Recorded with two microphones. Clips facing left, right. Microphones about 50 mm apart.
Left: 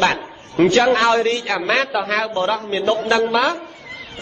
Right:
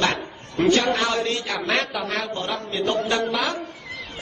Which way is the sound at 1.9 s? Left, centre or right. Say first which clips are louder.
Left 7 dB; left.